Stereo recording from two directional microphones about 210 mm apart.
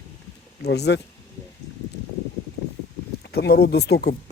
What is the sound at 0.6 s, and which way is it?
Speech, 50° left (ahead or behind).